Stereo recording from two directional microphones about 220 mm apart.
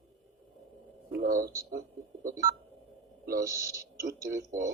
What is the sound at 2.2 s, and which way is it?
Telephone dialing, 40° right (ahead or behind).